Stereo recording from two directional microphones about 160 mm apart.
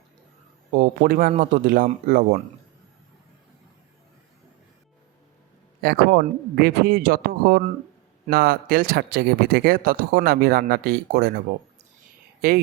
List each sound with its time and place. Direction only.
0.7 s speech: 60° right (ahead or behind)
5.8 s speech: 70° right (ahead or behind)
12.4 s speech: 65° right (ahead or behind)